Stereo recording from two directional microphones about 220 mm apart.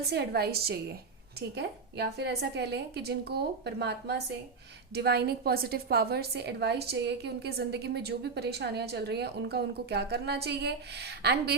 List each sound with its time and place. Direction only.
0.1 s a woman's voice: 45° right (ahead or behind)